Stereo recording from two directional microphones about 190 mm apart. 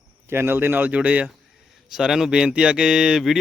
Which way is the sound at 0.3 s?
10° right (ahead or behind).